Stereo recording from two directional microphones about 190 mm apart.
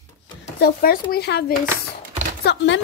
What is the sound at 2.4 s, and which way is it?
Chopping, 75° left (ahead or behind).